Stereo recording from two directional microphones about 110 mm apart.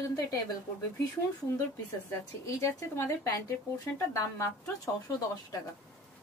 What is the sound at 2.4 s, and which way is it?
Speech, 25° left (ahead or behind).